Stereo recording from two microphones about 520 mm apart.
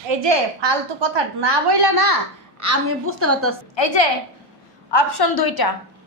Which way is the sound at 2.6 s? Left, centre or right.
Right.